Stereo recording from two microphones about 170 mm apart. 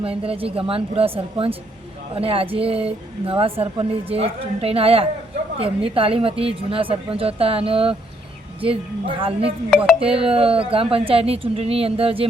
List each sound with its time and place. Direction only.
0.0 s speech: 35° right (ahead or behind)
9.6 s speech: centre (ahead or behind)
10.0 s speech: 35° right (ahead or behind)